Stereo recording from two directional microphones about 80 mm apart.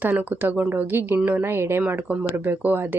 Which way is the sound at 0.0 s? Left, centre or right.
Right.